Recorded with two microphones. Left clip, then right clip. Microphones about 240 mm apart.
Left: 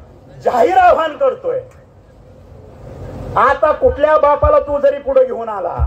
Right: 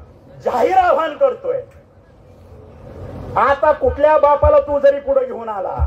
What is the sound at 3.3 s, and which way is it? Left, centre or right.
A man's voice, left.